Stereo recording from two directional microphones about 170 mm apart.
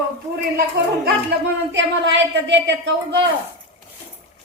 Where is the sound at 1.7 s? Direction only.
90° right.